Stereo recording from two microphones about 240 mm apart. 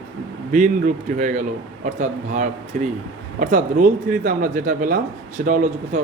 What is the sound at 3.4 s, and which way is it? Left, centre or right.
Speech, right.